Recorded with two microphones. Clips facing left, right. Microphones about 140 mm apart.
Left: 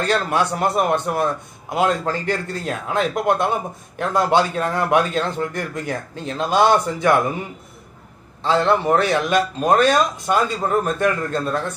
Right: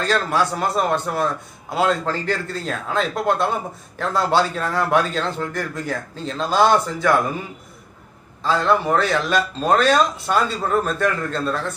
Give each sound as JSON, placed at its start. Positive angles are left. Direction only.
{"t": 0.0, "sound": "a man's voice", "side_deg": 20}
{"t": 8.4, "sound": "a man's voice", "side_deg": 20}